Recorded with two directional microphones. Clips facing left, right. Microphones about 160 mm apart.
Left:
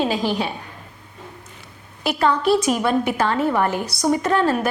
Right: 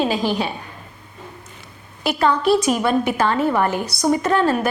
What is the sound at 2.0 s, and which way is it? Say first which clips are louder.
A woman's voice: right 1 dB; 10° right (ahead or behind).